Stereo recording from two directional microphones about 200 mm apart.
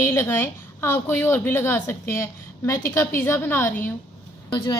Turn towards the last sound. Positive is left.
turn(degrees=20)  # may be behind; listen again after turning